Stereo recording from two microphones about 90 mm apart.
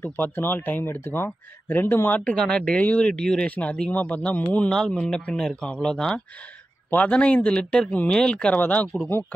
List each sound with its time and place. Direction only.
0.0 s speech: 25° left (ahead or behind)
2.3 s speech: 10° left (ahead or behind)
4.6 s speech: 5° left (ahead or behind)